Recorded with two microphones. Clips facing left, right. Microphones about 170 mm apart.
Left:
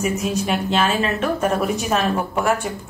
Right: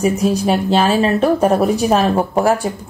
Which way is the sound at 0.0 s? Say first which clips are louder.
Right 6 dB; 35° right (ahead or behind).